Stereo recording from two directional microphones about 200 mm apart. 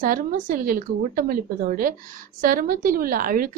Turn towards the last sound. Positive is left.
turn(degrees=-45)  # may be behind; listen again after turning